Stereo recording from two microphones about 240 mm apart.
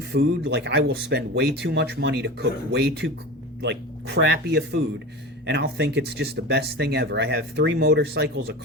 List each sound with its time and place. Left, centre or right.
0.1 s speech: right